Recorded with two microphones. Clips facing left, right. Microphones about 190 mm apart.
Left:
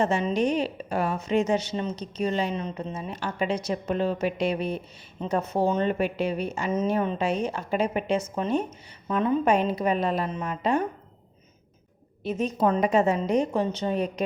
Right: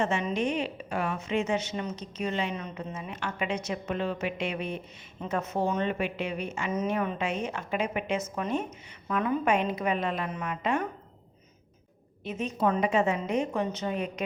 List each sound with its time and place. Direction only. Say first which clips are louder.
0.0 s a woman's voice: left 4 dB; 35° left (ahead or behind)
12.2 s a woman's voice: left 4 dB; 40° left (ahead or behind)